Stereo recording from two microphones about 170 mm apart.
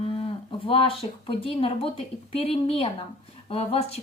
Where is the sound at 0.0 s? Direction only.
30° left (ahead or behind).